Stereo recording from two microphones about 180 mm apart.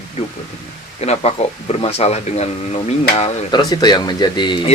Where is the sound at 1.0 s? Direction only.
35° left (ahead or behind).